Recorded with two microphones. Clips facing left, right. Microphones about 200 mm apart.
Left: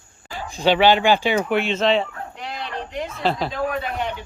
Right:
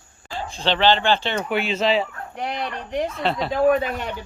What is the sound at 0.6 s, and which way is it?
Speech, 10° left (ahead or behind).